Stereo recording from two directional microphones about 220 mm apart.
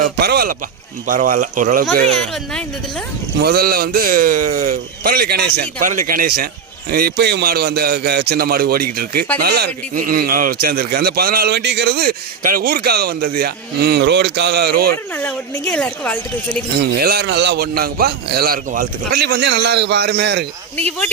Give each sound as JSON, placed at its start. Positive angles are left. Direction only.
{"t": 0.0, "sound": "a sound", "side_deg": -45}
{"t": 1.0, "sound": "speech", "side_deg": -40}
{"t": 2.3, "sound": "speech", "side_deg": 5}
{"t": 3.4, "sound": "a man's voice", "side_deg": -45}
{"t": 15.1, "sound": "speech", "side_deg": 5}
{"t": 16.7, "sound": "a man's voice", "side_deg": -45}
{"t": 20.7, "sound": "speech", "side_deg": 5}